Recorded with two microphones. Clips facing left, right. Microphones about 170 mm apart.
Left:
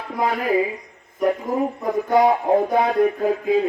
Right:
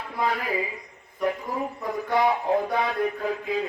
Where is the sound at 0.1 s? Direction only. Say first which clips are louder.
Left 7 dB; 45° left (ahead or behind).